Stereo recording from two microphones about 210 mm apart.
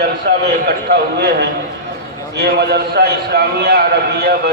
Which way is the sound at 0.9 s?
50° right (ahead or behind).